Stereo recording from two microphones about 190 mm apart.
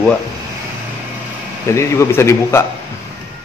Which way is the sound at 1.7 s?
15° left (ahead or behind).